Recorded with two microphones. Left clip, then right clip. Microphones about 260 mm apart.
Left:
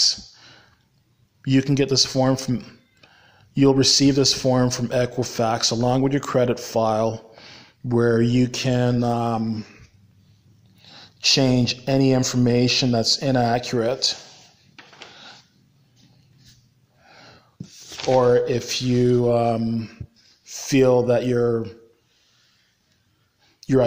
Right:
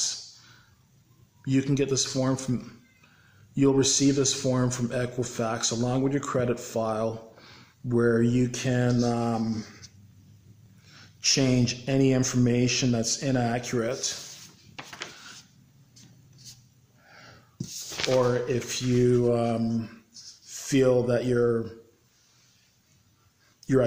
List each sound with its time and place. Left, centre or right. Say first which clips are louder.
0.0 s a sound: left 11 dB; left
1.4 s speech: left 6 dB; centre
10.9 s speech: left 7 dB; centre
17.0 s wheeze: left 3 dB; centre
18.2 s speech: left 8 dB; centre
23.6 s a sound: left 4 dB; centre